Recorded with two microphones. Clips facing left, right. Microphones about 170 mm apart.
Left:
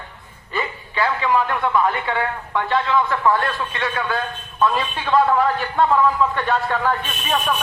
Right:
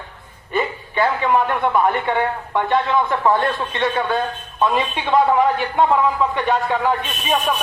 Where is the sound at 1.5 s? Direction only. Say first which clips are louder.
Right 2 dB; 20° right (ahead or behind).